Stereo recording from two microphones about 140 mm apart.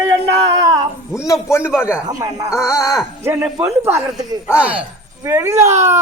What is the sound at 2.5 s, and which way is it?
Speech, 20° left (ahead or behind).